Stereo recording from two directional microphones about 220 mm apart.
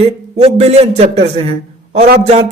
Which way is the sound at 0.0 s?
30° right (ahead or behind).